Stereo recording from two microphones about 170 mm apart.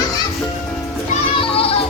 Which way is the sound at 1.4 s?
35° left (ahead or behind).